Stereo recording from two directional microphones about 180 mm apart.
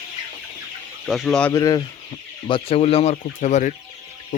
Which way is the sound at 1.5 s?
20° left (ahead or behind).